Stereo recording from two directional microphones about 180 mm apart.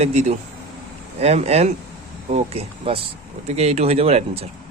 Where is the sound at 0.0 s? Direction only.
40° right (ahead or behind).